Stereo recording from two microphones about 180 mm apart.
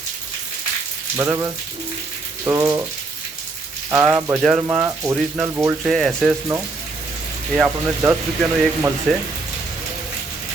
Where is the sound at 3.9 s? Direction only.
10° right (ahead or behind).